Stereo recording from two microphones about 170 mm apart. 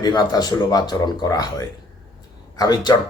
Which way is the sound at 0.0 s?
25° left (ahead or behind).